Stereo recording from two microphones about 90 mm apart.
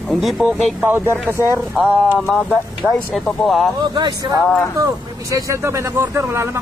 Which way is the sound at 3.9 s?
55° right (ahead or behind).